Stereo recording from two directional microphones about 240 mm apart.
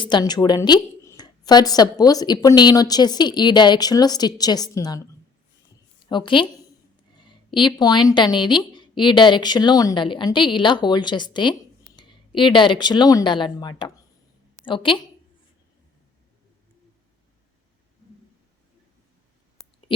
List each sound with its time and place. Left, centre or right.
0.0 s a woman's voice: centre
6.1 s a woman's voice: centre